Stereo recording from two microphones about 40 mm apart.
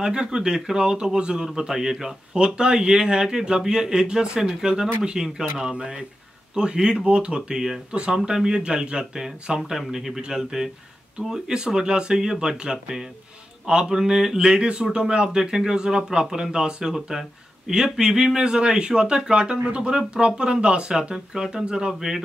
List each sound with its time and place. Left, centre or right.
0.0 s speech: right
7.3 s speech: centre
7.9 s speech: right
8.3 s speech: centre
13.8 s speech: centre